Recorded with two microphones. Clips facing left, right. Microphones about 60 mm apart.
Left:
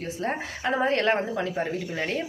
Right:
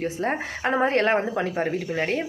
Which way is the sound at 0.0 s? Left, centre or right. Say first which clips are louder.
Right 4 dB; right.